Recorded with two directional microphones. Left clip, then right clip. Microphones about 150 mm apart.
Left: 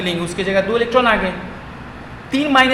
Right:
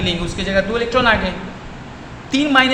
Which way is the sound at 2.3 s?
15° left (ahead or behind).